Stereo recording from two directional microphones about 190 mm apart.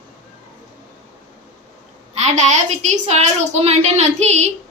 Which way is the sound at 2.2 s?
40° right (ahead or behind).